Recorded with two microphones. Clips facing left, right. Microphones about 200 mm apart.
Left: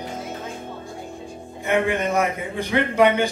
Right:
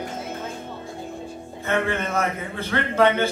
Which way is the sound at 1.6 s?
15° left (ahead or behind).